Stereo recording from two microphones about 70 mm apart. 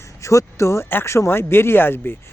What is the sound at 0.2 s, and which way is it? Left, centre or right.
Speech, left.